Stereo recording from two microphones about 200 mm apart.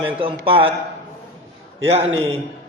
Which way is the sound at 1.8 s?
30° right (ahead or behind).